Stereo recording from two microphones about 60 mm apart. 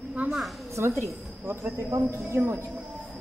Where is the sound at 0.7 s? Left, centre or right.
Right.